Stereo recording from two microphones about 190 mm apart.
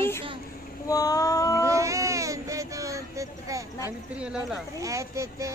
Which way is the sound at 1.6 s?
15° right (ahead or behind).